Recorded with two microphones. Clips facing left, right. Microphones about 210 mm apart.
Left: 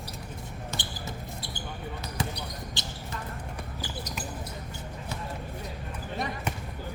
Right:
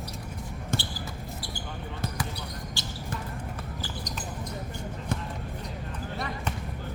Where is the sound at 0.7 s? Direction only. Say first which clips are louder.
Right 8 dB; 50° right (ahead or behind).